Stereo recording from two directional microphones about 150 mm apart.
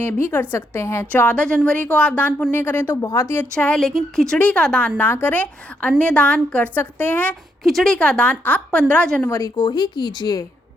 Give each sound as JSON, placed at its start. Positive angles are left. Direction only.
{"t": 0.0, "sound": "speech", "side_deg": 15}
{"t": 9.3, "sound": "speech", "side_deg": 25}